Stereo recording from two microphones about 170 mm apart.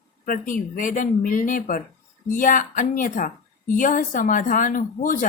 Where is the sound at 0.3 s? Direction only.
50° left (ahead or behind).